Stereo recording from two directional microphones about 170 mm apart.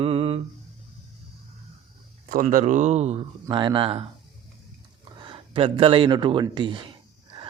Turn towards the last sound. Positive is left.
turn(degrees=-25)  # may be behind; listen again after turning